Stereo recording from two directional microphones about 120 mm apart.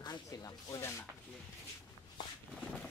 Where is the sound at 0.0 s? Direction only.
35° left (ahead or behind).